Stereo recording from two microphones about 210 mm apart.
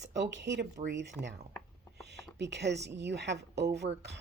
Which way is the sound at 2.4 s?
55° right (ahead or behind).